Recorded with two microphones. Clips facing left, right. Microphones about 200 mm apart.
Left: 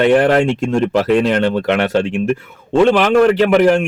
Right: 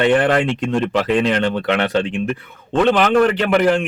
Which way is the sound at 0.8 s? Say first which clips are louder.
Left 4 dB; 10° left (ahead or behind).